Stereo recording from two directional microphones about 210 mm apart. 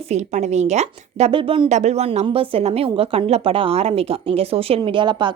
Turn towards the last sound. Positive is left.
turn(degrees=-20)  # may be behind; listen again after turning